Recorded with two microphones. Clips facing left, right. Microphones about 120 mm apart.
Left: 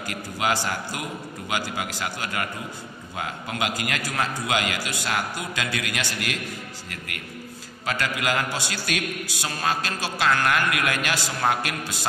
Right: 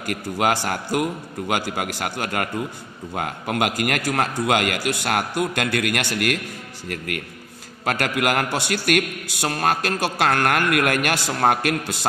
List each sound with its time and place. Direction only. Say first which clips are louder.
0.0 s a man's voice: right 5 dB; 60° right (ahead or behind)
7.8 s a man's voice: right 5 dB; 65° right (ahead or behind)